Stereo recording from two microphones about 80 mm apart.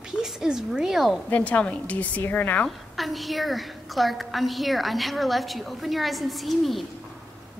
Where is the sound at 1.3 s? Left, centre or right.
Centre.